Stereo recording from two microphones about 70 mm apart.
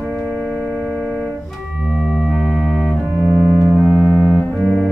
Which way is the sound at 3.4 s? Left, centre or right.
Right.